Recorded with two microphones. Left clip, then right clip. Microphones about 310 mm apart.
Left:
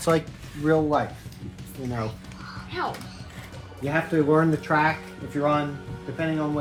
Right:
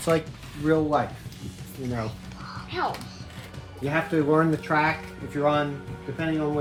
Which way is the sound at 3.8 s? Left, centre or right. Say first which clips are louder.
Left 1 dB; centre.